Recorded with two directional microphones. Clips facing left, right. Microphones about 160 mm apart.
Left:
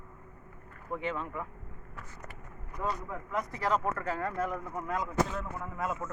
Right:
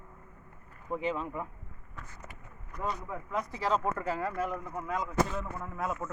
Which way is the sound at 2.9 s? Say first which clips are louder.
Even; centre (ahead or behind).